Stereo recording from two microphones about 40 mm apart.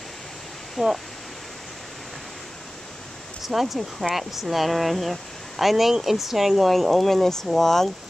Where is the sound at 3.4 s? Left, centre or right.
Centre.